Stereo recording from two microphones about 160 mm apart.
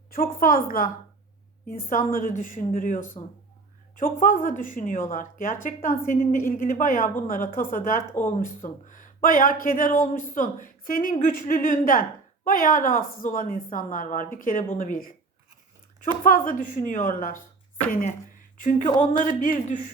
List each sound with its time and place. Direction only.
0.1 s a woman's voice: 60° left (ahead or behind)
16.2 s a woman's voice: 60° left (ahead or behind)